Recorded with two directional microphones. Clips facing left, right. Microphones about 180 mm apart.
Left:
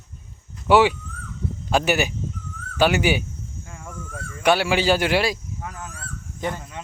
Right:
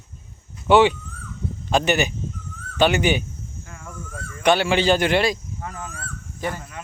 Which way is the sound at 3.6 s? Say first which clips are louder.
Left 1 dB; 20° left (ahead or behind).